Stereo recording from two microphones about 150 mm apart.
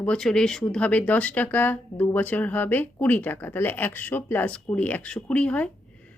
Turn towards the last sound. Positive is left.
turn(degrees=10)  # may be behind; listen again after turning